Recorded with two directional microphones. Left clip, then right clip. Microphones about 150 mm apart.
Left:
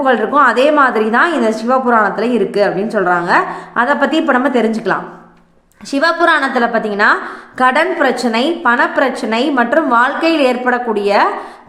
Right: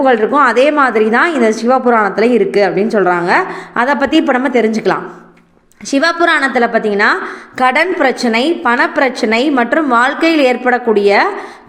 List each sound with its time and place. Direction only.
0.0 s a woman's voice: 20° right (ahead or behind)